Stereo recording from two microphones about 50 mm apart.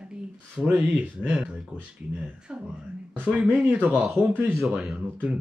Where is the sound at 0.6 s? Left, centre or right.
Right.